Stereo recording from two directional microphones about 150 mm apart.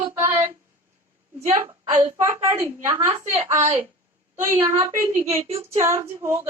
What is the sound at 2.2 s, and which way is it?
Female singing, 20° right (ahead or behind).